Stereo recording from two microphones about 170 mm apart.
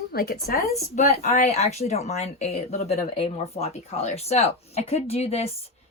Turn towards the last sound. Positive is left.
turn(degrees=40)  # may be behind; listen again after turning